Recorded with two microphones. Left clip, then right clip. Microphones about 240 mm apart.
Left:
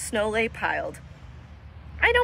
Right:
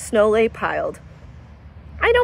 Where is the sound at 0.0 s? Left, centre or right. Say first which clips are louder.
Right 9 dB; right.